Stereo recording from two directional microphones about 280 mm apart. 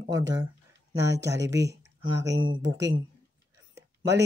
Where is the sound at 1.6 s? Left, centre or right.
Right.